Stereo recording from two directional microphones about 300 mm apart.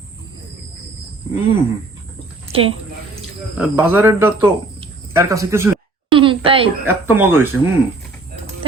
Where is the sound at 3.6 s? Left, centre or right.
Centre.